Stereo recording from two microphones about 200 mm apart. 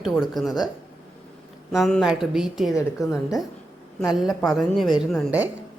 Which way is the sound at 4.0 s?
Centre (ahead or behind).